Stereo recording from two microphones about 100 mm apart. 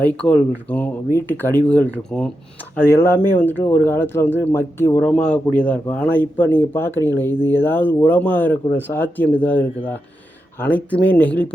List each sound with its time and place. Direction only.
0.2 s speech: 15° left (ahead or behind)
2.7 s speech: 25° left (ahead or behind)
4.9 s speech: 10° left (ahead or behind)